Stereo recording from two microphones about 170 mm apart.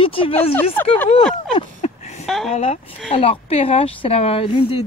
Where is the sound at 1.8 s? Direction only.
40° left (ahead or behind).